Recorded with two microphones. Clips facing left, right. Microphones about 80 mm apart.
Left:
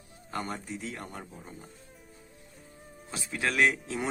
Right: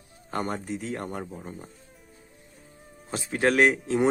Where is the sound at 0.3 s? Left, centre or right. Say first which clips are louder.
Right 5 dB; right.